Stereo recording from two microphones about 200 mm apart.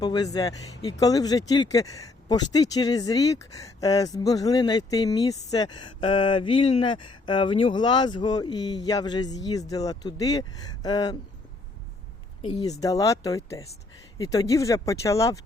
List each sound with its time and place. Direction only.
0.0 s speech: 20° left (ahead or behind)
12.4 s speech: 30° left (ahead or behind)
12.8 s speech: 15° left (ahead or behind)